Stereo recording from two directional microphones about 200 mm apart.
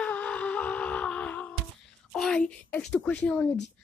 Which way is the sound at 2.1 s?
5° left (ahead or behind).